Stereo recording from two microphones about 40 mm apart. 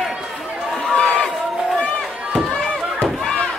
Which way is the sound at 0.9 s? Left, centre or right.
Left.